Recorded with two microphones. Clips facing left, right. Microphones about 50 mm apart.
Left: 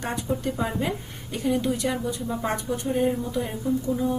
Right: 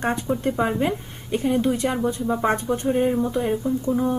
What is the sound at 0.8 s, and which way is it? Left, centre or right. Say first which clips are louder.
A woman's voice: right 4 dB; right.